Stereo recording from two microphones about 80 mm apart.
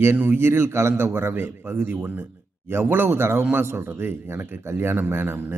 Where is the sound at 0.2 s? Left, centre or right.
Right.